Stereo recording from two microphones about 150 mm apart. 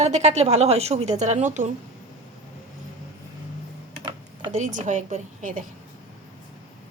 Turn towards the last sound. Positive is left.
turn(degrees=-60)  # may be behind; listen again after turning